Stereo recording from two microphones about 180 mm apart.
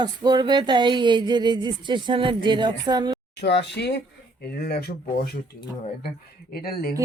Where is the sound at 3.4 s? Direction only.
70° left (ahead or behind).